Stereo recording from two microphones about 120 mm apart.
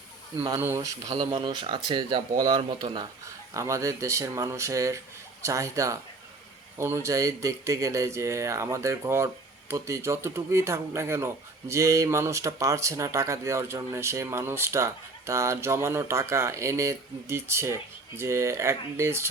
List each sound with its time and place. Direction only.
0.6 s speech: 25° right (ahead or behind)
1.0 s speech: 60° right (ahead or behind); by 2.7 s 45° right (ahead or behind)
2.9 s speech: 30° right (ahead or behind)